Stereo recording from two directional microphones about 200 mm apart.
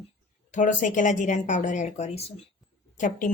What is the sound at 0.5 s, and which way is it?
Speech, 40° left (ahead or behind).